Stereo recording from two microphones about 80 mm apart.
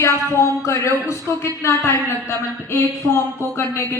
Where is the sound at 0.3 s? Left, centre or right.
Left.